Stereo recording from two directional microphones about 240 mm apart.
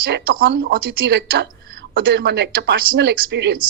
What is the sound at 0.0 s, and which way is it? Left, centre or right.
Speech, right.